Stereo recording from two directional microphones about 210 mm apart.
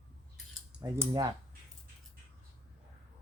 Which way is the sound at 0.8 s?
10° right (ahead or behind).